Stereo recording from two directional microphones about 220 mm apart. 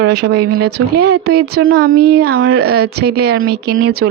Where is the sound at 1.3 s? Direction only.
45° right (ahead or behind).